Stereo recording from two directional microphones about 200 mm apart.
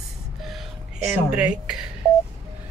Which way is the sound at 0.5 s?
5° right (ahead or behind).